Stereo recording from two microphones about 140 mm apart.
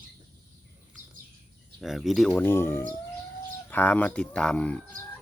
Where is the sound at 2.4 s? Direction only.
15° left (ahead or behind).